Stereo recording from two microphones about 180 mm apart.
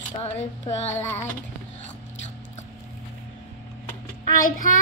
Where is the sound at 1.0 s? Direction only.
15° left (ahead or behind).